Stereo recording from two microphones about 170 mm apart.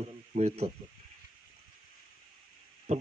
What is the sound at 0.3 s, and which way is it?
Speech, 40° right (ahead or behind).